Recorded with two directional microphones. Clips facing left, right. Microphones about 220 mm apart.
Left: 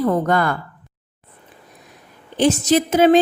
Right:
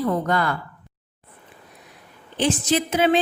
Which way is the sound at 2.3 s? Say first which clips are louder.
Left 5 dB; 40° left (ahead or behind).